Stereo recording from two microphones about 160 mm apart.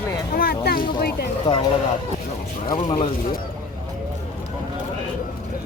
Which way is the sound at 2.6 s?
30° left (ahead or behind).